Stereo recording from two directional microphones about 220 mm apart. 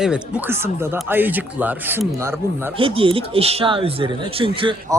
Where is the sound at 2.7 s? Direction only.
25° right (ahead or behind).